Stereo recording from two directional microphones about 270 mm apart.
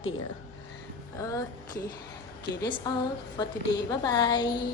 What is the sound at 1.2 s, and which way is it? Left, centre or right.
A woman's voice, centre.